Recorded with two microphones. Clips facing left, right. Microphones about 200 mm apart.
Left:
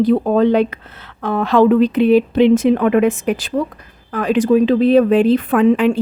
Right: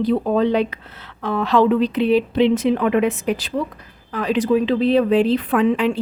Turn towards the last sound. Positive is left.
turn(degrees=45)  # may be behind; listen again after turning